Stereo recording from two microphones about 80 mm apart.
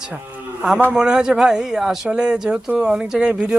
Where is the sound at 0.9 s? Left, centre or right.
Centre.